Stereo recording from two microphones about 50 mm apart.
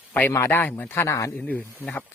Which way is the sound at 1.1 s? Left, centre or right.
Left.